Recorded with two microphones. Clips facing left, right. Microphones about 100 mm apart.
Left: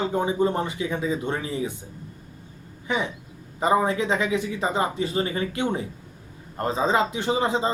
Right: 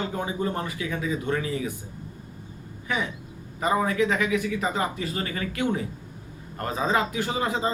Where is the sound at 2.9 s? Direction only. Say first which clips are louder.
Left 2 dB; 25° left (ahead or behind).